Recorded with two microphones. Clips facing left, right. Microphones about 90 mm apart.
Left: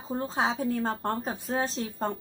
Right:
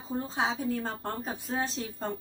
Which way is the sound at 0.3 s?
40° left (ahead or behind).